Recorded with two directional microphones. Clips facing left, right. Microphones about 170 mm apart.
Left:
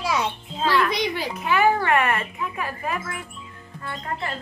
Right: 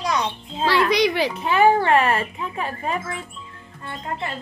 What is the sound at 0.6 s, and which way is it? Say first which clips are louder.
Speech: right 3 dB; 85° right.